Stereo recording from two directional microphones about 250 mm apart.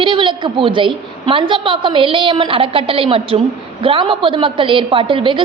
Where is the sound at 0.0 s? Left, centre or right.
Centre.